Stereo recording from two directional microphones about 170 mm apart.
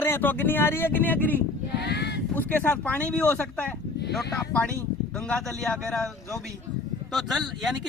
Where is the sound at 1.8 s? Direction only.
80° left.